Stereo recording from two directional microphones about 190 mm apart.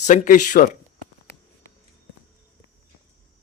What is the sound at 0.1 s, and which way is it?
Speech, 40° left (ahead or behind).